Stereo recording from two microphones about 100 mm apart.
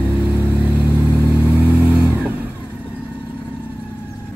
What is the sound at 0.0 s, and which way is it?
Vehicle, 15° right (ahead or behind).